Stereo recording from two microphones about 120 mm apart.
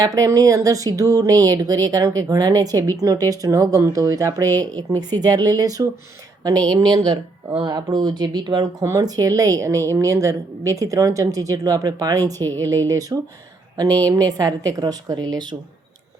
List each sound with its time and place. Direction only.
0.0 s speech: 30° right (ahead or behind)